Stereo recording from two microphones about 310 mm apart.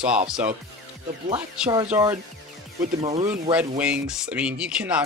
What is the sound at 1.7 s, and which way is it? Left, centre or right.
Music, centre.